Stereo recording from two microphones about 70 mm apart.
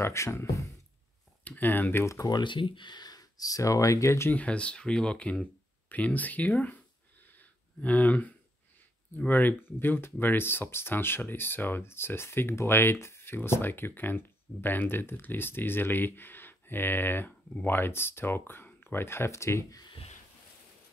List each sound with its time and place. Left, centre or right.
0.0 s speech: left
1.4 s speech: left
2.2 s speech: left
4.3 s speech: centre
7.2 s a sound: left
9.2 s speech: left